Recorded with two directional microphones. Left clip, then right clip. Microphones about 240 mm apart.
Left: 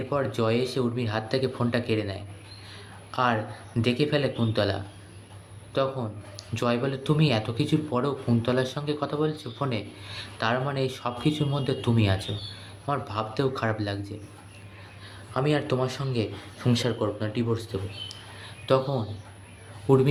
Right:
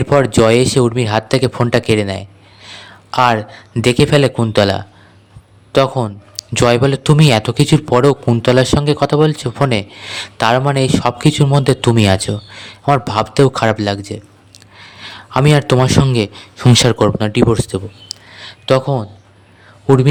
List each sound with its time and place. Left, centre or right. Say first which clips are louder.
0.1 s a man's voice: right 16 dB; right